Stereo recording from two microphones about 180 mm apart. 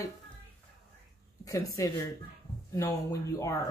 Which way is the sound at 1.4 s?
20° left (ahead or behind).